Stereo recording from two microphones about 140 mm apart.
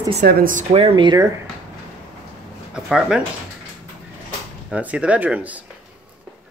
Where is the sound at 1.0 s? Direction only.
30° right (ahead or behind).